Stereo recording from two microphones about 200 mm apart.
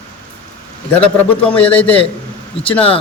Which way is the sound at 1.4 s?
5° left (ahead or behind).